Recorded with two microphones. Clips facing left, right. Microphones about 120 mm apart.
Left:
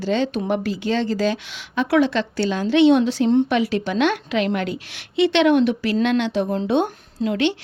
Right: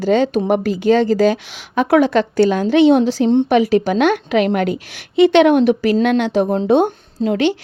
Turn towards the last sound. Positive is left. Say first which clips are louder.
# right 4 dB
turn(degrees=-40)  # may be behind; listen again after turning